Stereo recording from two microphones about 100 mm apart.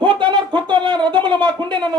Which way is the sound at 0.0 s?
50° right (ahead or behind).